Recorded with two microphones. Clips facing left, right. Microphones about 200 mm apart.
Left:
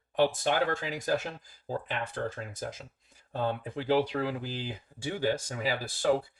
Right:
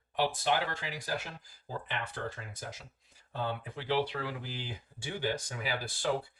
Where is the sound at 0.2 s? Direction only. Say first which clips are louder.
Left 4 dB; 45° left (ahead or behind).